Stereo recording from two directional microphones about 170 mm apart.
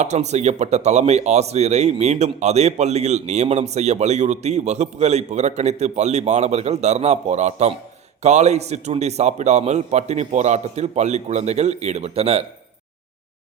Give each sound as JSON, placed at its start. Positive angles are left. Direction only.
{"t": 0.0, "sound": "speech", "side_deg": -40}